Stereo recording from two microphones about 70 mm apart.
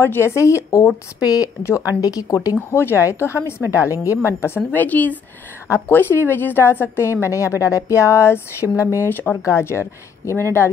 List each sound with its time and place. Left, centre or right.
0.0 s speech: left
1.2 s speech: left
1.6 s speech: left
2.0 s speech: left
2.7 s a woman's voice: left
4.6 s a woman's voice: left
9.1 s a woman's voice: left
9.4 s a woman's voice: left